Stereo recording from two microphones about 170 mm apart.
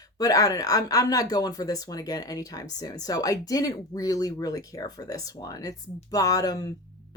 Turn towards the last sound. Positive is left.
turn(degrees=20)  # may be behind; listen again after turning